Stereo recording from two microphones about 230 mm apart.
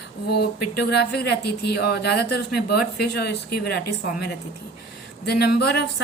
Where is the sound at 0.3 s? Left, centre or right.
Left.